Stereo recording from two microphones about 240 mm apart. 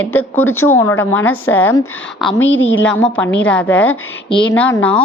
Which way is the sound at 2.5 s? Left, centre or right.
Left.